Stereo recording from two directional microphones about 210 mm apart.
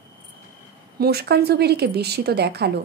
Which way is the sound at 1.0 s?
50° right (ahead or behind).